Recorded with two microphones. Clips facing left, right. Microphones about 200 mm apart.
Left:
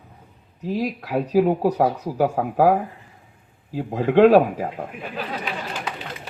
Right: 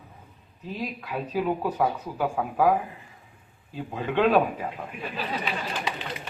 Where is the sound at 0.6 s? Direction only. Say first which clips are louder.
Left 8 dB; 85° left.